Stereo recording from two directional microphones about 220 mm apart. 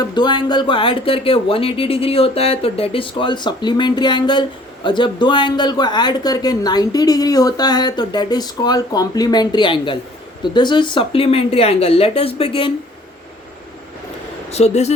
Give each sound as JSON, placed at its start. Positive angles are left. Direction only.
{"t": 0.0, "sound": "speech", "side_deg": 20}
{"t": 14.5, "sound": "speech", "side_deg": 30}